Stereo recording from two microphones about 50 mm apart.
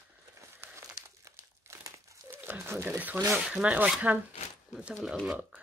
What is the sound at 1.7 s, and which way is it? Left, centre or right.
Crumpling, right.